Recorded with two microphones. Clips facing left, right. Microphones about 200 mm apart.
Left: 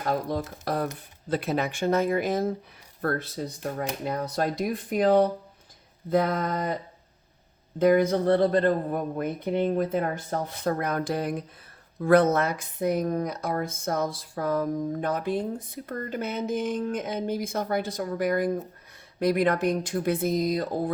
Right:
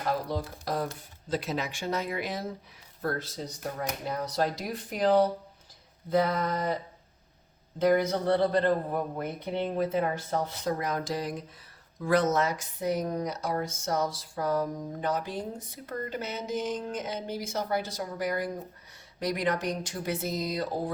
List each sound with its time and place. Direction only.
0.1 s speech: 55° left (ahead or behind)
3.0 s speech: 60° left (ahead or behind)
7.8 s speech: 50° left (ahead or behind)